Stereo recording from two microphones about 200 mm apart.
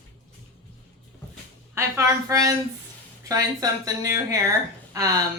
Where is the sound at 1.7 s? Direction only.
15° right (ahead or behind).